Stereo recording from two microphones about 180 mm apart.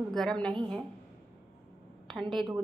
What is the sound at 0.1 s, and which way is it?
Speech, 5° left (ahead or behind).